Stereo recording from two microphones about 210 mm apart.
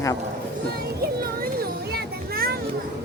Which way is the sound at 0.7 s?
45° right (ahead or behind).